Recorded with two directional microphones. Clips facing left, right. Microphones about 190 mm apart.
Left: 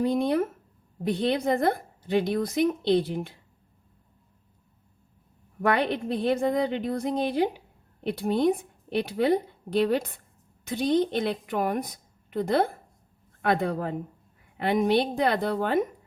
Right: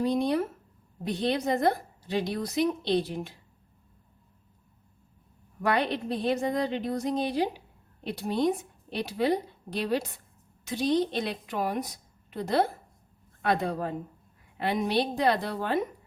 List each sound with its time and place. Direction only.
0.1 s a woman's voice: 55° left (ahead or behind)
5.6 s a woman's voice: 55° left (ahead or behind)